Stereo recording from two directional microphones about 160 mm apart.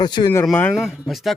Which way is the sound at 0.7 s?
Centre (ahead or behind).